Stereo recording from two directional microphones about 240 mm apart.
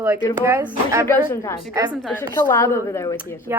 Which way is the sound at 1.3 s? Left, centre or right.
Centre.